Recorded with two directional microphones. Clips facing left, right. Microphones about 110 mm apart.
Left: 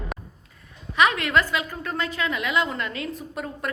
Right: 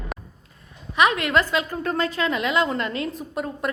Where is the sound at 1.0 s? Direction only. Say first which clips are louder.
Right 1 dB; 20° right (ahead or behind).